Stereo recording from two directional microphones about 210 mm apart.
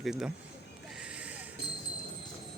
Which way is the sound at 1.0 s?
5° right (ahead or behind).